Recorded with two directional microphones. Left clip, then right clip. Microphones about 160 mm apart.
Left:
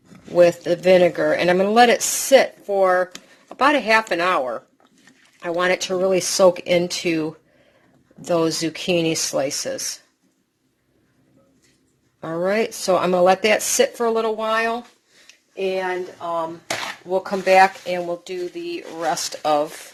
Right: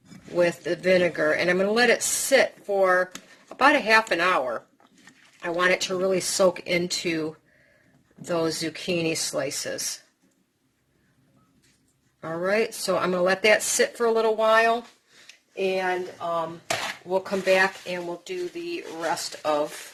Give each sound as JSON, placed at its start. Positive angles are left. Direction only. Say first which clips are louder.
{"t": 0.3, "sound": "speech", "louder": "left 8 dB", "side_deg": 25}
{"t": 12.5, "sound": "speech", "louder": "left 4 dB", "side_deg": 25}
{"t": 15.8, "sound": "speech", "louder": "left 2 dB", "side_deg": 0}
{"t": 17.4, "sound": "speech", "louder": "left 9 dB", "side_deg": 25}